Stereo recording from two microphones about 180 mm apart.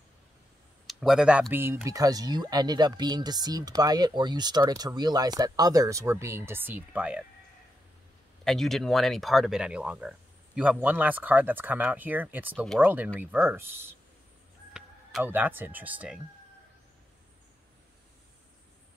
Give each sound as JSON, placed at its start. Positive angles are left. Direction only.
{"t": 0.8, "sound": "speech", "side_deg": -5}
{"t": 8.5, "sound": "speech", "side_deg": 0}